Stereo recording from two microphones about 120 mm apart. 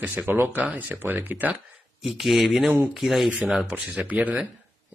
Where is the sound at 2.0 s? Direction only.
Centre (ahead or behind).